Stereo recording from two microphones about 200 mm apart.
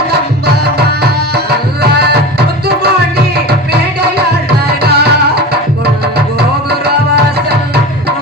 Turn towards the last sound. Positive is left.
turn(degrees=-55)  # may be behind; listen again after turning